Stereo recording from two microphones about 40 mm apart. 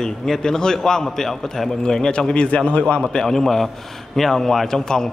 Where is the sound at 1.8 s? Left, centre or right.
Centre.